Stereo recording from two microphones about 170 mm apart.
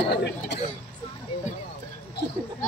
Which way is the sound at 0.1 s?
80° left.